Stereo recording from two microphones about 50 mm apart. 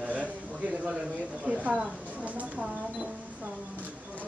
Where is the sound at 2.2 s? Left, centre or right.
Right.